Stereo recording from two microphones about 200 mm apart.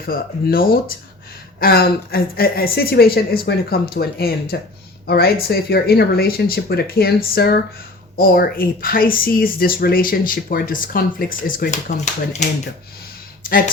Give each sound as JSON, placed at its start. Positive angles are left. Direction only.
{"t": 0.0, "sound": "speech", "side_deg": 45}